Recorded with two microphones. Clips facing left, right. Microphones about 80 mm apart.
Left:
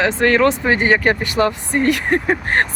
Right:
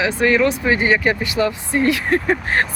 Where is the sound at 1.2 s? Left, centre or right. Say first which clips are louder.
Left 2 dB; left.